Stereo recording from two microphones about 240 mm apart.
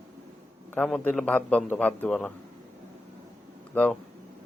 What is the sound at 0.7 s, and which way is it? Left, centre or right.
A man's voice, centre.